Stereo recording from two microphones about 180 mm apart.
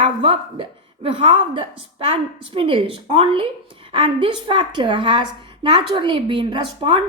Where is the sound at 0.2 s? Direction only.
30° right (ahead or behind).